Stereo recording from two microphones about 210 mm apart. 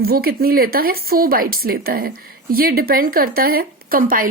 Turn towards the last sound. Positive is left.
turn(degrees=-40)  # may be behind; listen again after turning